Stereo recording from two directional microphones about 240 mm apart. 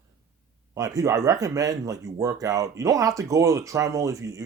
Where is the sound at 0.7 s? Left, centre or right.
Centre.